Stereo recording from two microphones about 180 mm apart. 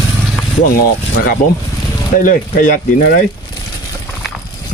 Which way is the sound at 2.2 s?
45° left (ahead or behind).